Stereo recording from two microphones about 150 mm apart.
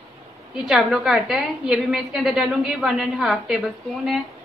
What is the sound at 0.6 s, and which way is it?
A woman's voice, 5° right (ahead or behind).